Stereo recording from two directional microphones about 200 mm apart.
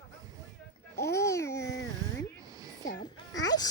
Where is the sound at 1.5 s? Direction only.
60° left (ahead or behind).